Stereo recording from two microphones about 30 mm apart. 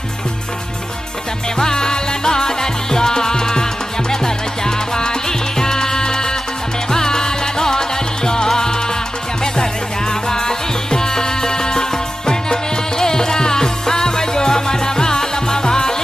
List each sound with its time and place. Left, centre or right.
1.5 s music: left
10.1 s music: left